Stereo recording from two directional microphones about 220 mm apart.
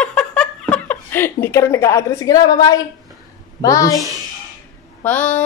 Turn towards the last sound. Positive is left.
turn(degrees=5)  # may be behind; listen again after turning